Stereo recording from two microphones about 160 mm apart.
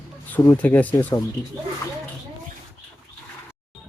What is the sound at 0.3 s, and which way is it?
Speech, 10° left (ahead or behind).